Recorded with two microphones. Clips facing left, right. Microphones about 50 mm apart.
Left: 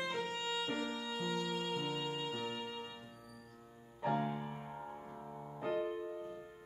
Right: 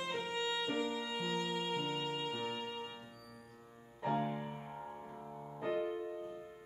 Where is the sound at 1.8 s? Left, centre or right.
Centre.